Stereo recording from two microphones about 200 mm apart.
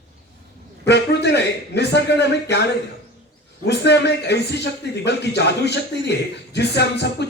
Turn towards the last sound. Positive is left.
turn(degrees=55)  # may be behind; listen again after turning